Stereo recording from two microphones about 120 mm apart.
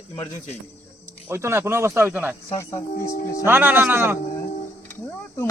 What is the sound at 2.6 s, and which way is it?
Speech, 25° left (ahead or behind).